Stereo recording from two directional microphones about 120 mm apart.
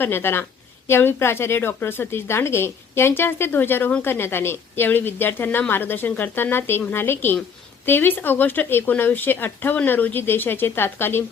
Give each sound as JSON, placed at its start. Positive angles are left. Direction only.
{"t": 0.0, "sound": "a woman's voice", "side_deg": 20}